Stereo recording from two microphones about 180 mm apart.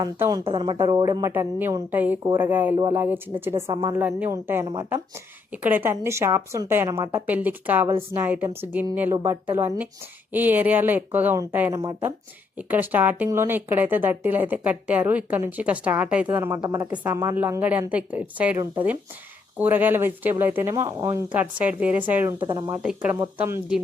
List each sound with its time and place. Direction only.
0.0 s a woman's voice: 20° right (ahead or behind)
12.5 s speech: 10° right (ahead or behind)
18.5 s a woman's voice: 20° right (ahead or behind)
19.5 s speech: 10° right (ahead or behind)
22.4 s a woman's voice: 20° right (ahead or behind)
22.7 s speech: 5° right (ahead or behind)